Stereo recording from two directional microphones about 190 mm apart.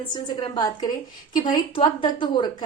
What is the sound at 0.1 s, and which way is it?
A woman's voice, 20° left (ahead or behind).